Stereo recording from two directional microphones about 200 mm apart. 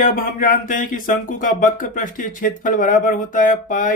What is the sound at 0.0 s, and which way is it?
A man's voice, 45° left (ahead or behind).